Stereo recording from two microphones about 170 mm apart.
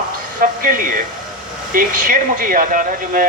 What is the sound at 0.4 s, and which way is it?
Speech, 55° right (ahead or behind).